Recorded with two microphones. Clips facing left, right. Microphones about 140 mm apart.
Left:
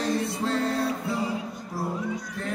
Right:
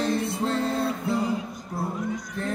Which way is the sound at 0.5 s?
25° right (ahead or behind).